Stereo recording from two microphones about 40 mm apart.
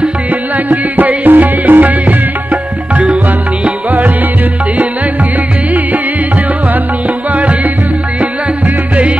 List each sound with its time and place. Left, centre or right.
0.7 s music: right